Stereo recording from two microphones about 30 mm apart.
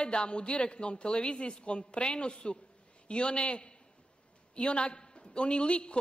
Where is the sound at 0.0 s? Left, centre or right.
Left.